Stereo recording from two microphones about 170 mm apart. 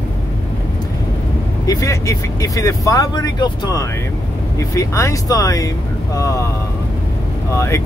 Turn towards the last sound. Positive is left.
turn(degrees=15)  # may be behind; listen again after turning